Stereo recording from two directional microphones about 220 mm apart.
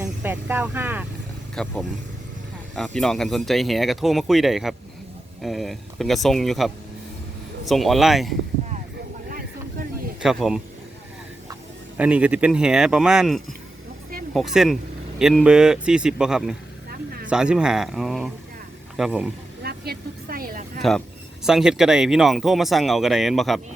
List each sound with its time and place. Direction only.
0.0 s speech: 10° right (ahead or behind)
1.6 s speech: centre (ahead or behind)
2.7 s speech: 5° left (ahead or behind)
10.2 s speech: centre (ahead or behind)
11.9 s speech: 5° right (ahead or behind)
19.6 s speech: 45° right (ahead or behind)
21.4 s speech: 5° right (ahead or behind)